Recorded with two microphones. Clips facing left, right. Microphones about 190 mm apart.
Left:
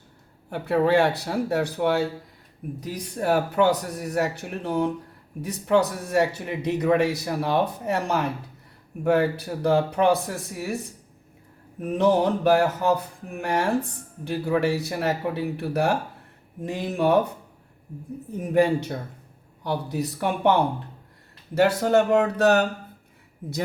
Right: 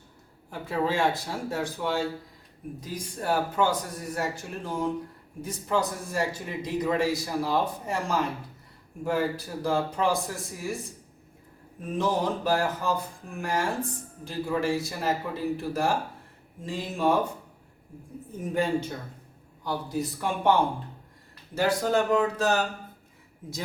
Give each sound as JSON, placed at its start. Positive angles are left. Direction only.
{"t": 0.5, "sound": "a man's voice", "side_deg": 65}
{"t": 11.8, "sound": "a man's voice", "side_deg": 65}
{"t": 18.3, "sound": "a man's voice", "side_deg": 65}
{"t": 21.5, "sound": "a man's voice", "side_deg": 70}